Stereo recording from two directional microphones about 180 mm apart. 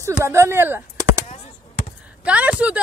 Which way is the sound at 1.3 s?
40° left (ahead or behind).